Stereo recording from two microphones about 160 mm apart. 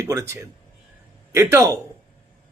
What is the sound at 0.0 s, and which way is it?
A man's voice, 20° right (ahead or behind).